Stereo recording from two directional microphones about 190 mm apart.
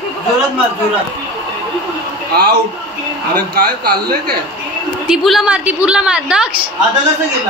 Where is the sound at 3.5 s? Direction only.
55° right (ahead or behind).